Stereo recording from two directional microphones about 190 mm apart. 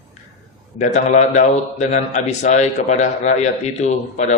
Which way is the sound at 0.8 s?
35° left (ahead or behind).